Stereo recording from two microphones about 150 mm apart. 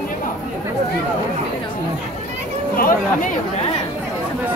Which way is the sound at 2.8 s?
65° left (ahead or behind).